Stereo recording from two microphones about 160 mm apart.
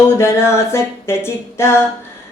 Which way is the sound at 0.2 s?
15° left (ahead or behind).